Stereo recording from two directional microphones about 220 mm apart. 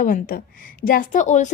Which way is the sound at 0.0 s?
40° left (ahead or behind).